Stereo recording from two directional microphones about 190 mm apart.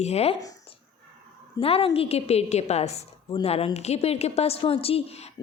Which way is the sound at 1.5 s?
30° left (ahead or behind).